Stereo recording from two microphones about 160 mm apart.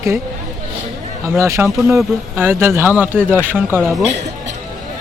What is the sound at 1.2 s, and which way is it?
Speech, 15° right (ahead or behind).